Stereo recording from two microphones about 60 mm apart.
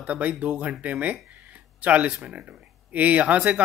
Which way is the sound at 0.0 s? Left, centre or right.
Right.